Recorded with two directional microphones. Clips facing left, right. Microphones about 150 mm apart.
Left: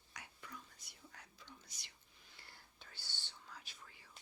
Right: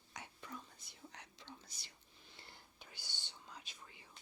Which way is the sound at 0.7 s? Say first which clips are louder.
Right 4 dB; 75° right (ahead or behind).